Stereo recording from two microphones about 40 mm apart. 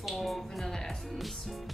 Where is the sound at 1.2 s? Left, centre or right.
Centre.